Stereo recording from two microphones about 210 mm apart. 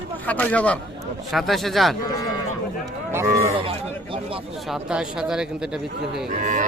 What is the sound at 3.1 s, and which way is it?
Speech, 15° right (ahead or behind).